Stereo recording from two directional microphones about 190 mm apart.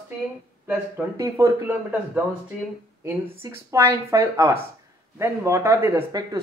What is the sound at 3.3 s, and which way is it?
Speech, 15° right (ahead or behind).